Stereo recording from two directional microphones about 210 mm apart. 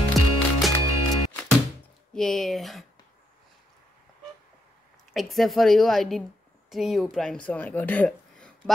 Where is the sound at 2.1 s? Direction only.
Centre (ahead or behind).